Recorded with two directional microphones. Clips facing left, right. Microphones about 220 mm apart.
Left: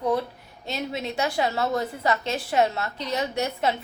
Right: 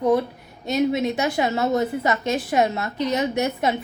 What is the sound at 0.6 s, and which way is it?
A woman's voice, 20° right (ahead or behind).